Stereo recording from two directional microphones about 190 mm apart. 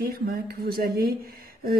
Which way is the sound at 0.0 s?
55° right (ahead or behind).